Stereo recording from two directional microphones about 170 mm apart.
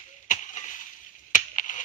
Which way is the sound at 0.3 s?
50° left (ahead or behind).